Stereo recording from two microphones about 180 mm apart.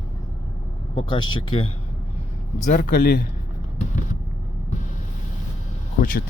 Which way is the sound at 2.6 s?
50° left (ahead or behind).